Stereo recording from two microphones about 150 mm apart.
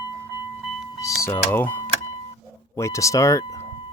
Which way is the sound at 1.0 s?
20° left (ahead or behind).